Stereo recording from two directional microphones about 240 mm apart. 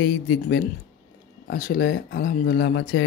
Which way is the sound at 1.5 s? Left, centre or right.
Left.